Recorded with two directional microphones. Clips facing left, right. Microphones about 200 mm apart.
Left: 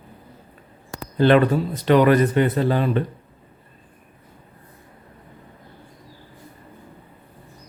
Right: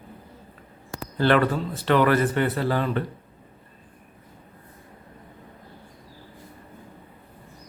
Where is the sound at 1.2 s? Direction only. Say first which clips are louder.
Left 5 dB; 20° left (ahead or behind).